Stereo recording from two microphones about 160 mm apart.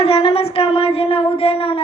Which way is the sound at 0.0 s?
35° left (ahead or behind).